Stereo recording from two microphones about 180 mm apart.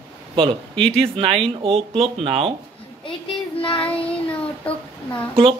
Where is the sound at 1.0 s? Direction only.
30° right (ahead or behind).